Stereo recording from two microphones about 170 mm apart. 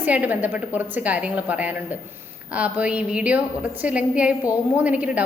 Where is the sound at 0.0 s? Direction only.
10° right (ahead or behind).